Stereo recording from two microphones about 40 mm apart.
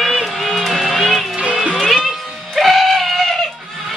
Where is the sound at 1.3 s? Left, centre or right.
Right.